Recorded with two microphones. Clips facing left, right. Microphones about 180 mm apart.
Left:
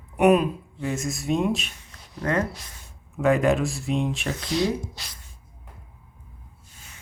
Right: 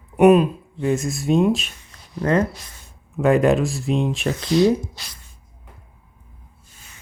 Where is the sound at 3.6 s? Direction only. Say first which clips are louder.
Right 4 dB; 35° right (ahead or behind).